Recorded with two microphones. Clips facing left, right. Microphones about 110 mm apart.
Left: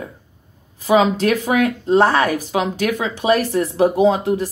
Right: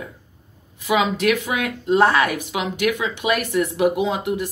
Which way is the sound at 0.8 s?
35° left (ahead or behind).